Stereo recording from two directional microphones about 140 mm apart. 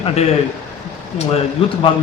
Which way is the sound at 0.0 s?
45° left (ahead or behind).